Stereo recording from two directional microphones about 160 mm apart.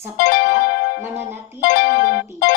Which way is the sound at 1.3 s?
15° right (ahead or behind).